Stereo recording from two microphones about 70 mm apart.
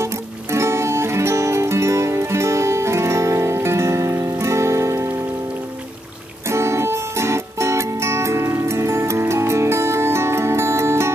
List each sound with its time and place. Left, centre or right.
0.0 s music: right
6.5 s music: right